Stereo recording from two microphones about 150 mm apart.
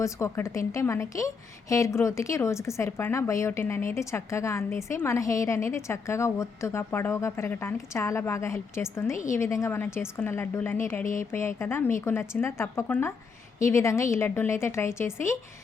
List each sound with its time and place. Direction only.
0.0 s a woman's voice: 20° left (ahead or behind)